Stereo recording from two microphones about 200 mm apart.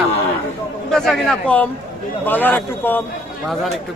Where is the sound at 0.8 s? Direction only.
Centre (ahead or behind).